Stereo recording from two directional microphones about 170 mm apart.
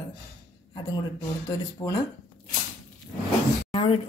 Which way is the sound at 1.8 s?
20° left (ahead or behind).